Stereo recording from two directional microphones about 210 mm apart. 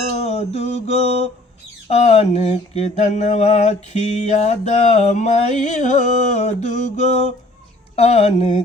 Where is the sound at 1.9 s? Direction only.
30° left (ahead or behind).